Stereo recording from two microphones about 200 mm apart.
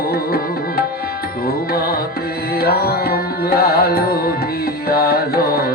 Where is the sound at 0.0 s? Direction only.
50° left (ahead or behind).